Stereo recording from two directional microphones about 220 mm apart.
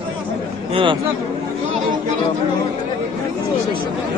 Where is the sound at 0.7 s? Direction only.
25° right (ahead or behind).